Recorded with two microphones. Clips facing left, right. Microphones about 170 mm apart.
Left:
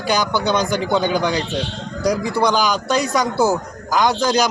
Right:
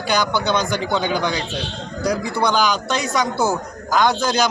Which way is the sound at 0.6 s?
35° left (ahead or behind).